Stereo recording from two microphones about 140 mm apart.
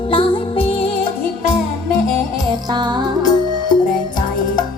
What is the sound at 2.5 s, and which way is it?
Music, 30° right (ahead or behind).